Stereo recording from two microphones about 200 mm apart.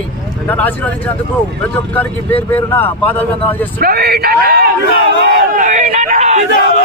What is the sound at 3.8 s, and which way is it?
Speech, 50° right (ahead or behind).